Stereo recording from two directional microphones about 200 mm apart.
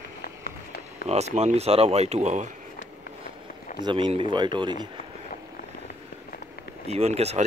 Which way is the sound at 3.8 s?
25° right (ahead or behind).